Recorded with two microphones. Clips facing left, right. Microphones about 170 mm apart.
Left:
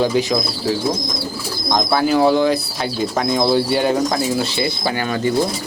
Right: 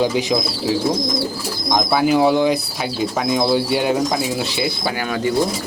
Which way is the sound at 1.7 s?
10° right (ahead or behind).